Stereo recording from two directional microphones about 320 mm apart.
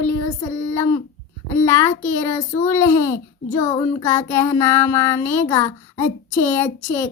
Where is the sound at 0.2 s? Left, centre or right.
Centre.